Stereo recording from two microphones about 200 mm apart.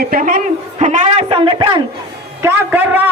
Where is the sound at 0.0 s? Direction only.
45° right (ahead or behind); by 1.8 s 25° right (ahead or behind).